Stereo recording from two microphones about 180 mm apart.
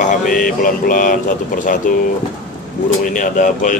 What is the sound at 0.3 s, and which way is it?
A man's voice, 50° left (ahead or behind).